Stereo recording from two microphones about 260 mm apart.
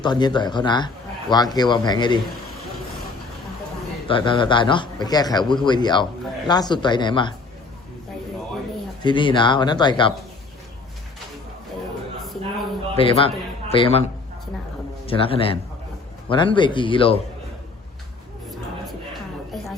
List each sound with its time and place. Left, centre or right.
0.0 s a man's voice: centre
4.1 s a man's voice: centre
9.0 s a man's voice: centre
12.2 s a sound: centre
13.0 s a man's voice: left
15.0 s speech: left